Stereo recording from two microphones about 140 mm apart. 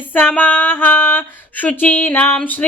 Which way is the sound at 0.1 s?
15° left (ahead or behind).